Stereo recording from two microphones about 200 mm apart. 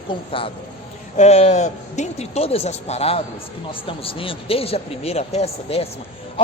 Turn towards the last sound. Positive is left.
turn(degrees=30)  # may be behind; listen again after turning